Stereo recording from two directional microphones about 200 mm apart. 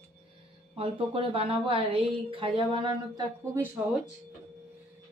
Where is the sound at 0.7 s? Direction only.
25° right (ahead or behind).